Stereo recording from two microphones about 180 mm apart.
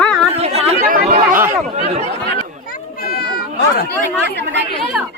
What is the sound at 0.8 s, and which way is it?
Chatter, 50° right (ahead or behind).